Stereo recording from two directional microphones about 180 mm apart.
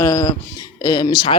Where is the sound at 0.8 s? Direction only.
25° left (ahead or behind).